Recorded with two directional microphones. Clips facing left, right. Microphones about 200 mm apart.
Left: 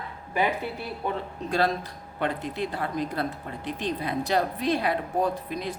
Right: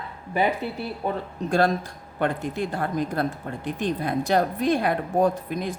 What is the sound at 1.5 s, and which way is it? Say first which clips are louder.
Speech: right 4 dB; 50° right (ahead or behind).